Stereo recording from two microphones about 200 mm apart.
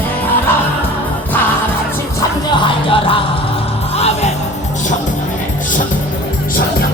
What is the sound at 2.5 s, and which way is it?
Music, 25° left (ahead or behind).